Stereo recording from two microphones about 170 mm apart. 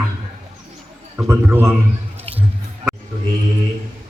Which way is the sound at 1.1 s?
10° right (ahead or behind).